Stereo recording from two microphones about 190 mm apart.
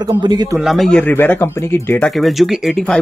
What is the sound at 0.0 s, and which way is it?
Speech, 20° right (ahead or behind).